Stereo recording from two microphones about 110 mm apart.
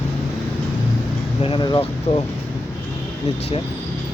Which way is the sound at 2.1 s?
65° left (ahead or behind).